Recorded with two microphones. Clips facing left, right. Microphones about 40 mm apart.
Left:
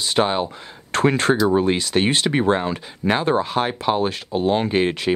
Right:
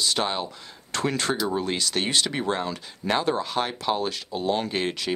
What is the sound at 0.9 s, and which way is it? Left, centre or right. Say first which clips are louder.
Speech: left 8 dB; left.